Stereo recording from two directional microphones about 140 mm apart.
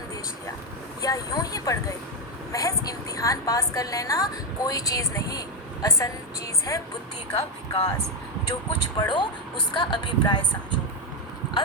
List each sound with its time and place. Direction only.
1.0 s a woman's voice: 25° left (ahead or behind)
9.0 s speech: 35° left (ahead or behind)